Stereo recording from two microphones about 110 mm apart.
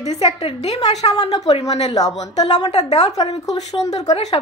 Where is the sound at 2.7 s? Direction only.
90° left.